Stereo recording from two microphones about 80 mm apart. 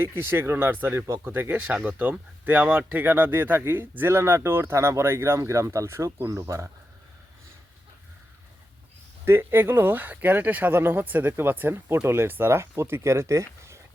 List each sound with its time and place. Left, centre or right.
0.0 s speech: right
9.2 s speech: right